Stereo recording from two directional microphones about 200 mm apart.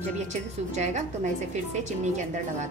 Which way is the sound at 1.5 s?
35° right (ahead or behind).